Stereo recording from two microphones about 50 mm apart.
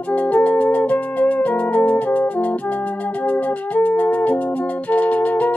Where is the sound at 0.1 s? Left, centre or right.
Left.